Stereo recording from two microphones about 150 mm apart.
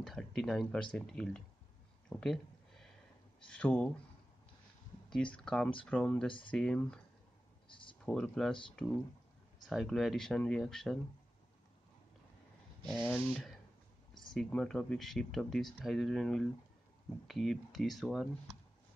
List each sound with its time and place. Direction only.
0.0 s speech: centre (ahead or behind)
2.0 s a sound: 5° left (ahead or behind)
3.4 s speech: 5° left (ahead or behind)
5.1 s speech: 5° left (ahead or behind)
7.6 s a sound: 35° left (ahead or behind)
8.0 s speech: 5° left (ahead or behind)
9.7 s speech: centre (ahead or behind)
13.0 s speech: 10° left (ahead or behind)